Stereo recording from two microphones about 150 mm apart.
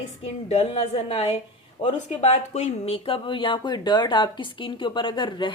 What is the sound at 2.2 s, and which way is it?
Speech, 50° left (ahead or behind).